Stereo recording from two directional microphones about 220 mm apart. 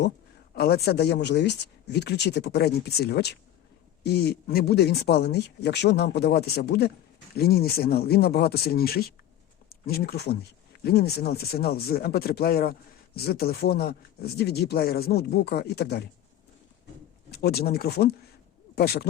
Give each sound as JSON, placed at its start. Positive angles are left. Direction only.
{"t": 0.5, "sound": "speech", "side_deg": 45}
{"t": 17.3, "sound": "speech", "side_deg": 45}